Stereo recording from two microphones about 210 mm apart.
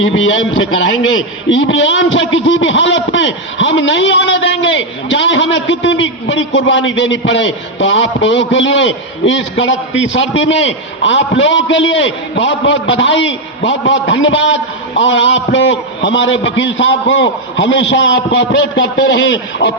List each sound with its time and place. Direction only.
0.0 s a man's voice: 65° left (ahead or behind)